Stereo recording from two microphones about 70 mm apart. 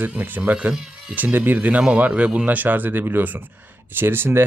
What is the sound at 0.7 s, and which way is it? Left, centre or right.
Speech, centre.